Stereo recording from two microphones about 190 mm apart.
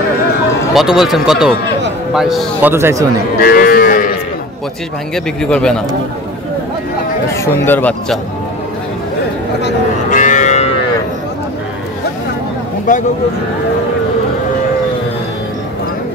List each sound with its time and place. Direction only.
0.7 s speech: centre (ahead or behind)
2.7 s speech: 15° right (ahead or behind)
3.3 s moo: 50° left (ahead or behind)
5.1 s speech: 5° left (ahead or behind)
7.3 s speech: 10° left (ahead or behind)
10.0 s music: 40° left (ahead or behind)